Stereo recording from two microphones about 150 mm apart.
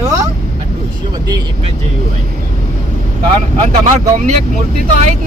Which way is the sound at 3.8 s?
60° right (ahead or behind).